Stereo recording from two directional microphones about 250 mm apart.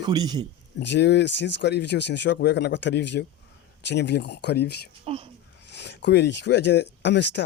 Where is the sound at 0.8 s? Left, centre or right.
Left.